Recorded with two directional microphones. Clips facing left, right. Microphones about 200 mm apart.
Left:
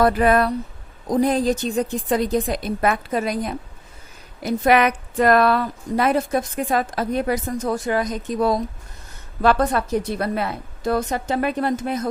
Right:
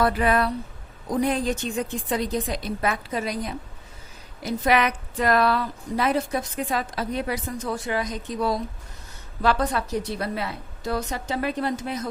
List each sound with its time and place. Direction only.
0.0 s a woman's voice: 45° left (ahead or behind)